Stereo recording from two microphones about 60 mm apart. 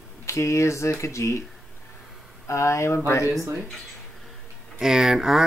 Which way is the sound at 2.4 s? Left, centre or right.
Left.